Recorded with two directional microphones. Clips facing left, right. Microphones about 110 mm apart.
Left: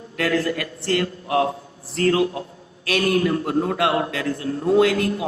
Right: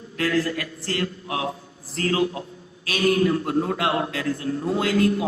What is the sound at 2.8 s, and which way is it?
A man's voice, 65° left (ahead or behind).